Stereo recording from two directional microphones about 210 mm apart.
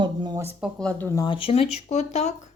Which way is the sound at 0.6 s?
5° left (ahead or behind).